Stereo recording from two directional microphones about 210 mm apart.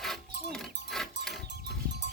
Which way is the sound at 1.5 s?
55° right (ahead or behind).